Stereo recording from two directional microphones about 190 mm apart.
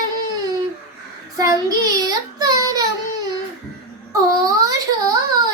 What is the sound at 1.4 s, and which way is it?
Child singing, 20° right (ahead or behind).